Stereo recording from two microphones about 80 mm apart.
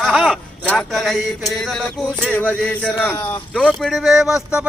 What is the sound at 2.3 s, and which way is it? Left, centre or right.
A man's voice, centre.